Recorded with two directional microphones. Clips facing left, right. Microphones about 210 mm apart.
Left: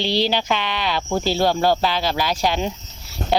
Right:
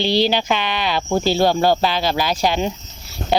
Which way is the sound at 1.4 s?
25° right (ahead or behind).